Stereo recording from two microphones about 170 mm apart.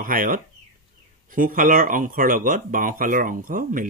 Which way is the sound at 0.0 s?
55° right (ahead or behind).